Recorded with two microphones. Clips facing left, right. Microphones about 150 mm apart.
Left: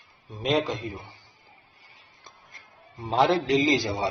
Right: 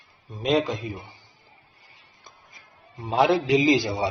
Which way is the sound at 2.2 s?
Centre (ahead or behind).